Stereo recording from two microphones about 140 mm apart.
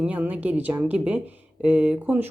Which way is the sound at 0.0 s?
10° right (ahead or behind).